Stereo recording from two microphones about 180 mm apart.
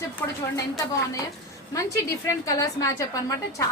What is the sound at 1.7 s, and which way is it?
A woman's voice, 15° left (ahead or behind).